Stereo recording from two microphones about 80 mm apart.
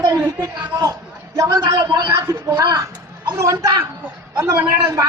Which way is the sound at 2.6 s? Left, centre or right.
Right.